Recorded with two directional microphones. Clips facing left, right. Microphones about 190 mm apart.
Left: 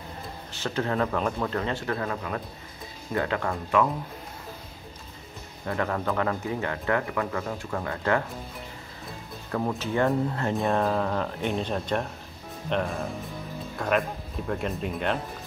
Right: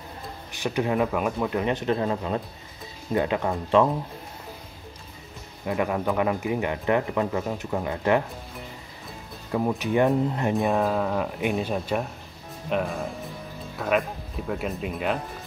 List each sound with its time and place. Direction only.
0.5 s speech: 15° right (ahead or behind)
5.7 s speech: 15° right (ahead or behind)
9.5 s speech: 10° right (ahead or behind)
10.8 s speech: 5° right (ahead or behind)